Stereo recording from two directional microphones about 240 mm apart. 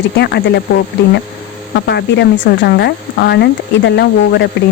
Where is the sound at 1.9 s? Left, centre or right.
Left.